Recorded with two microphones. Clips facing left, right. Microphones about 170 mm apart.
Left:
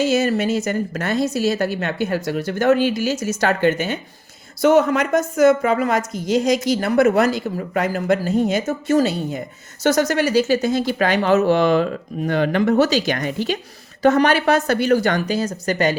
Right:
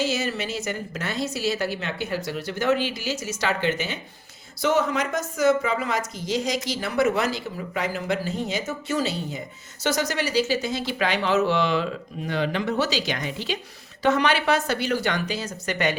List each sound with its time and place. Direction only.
0.0 s a woman's voice: 50° left (ahead or behind)